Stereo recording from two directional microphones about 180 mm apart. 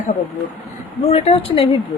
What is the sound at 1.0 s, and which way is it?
Speech, 35° left (ahead or behind).